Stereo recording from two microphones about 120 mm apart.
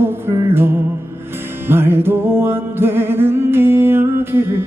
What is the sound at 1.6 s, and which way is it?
Music, 20° right (ahead or behind).